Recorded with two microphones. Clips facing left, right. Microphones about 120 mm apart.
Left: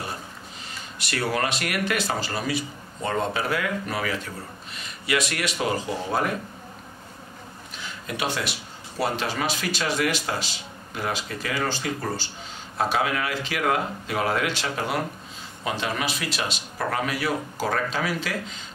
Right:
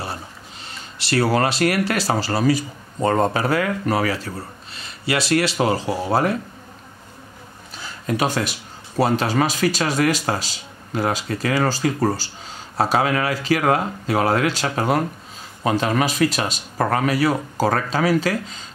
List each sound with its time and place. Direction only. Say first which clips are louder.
0.9 s speech: right 8 dB; 30° right (ahead or behind)
7.8 s speech: right 7 dB; 40° right (ahead or behind)